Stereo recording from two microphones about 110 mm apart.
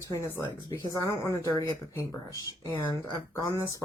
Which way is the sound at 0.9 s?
30° left (ahead or behind).